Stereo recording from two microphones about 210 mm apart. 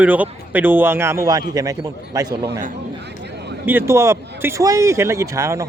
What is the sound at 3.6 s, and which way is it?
Speech, 10° right (ahead or behind).